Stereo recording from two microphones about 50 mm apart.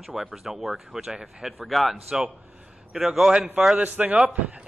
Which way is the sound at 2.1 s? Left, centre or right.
Centre.